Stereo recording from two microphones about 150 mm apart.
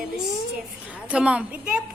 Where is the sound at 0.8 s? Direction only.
10° right (ahead or behind).